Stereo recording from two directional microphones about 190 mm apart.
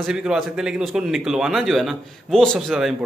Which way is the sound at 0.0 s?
5° right (ahead or behind).